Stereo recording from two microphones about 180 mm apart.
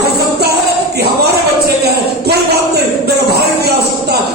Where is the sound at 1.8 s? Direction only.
65° right (ahead or behind).